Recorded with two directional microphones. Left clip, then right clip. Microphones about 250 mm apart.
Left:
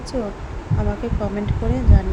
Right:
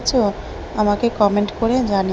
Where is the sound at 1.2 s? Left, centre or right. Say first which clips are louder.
Right 9 dB; centre.